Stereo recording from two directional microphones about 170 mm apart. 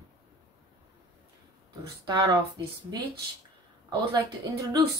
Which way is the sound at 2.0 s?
25° right (ahead or behind).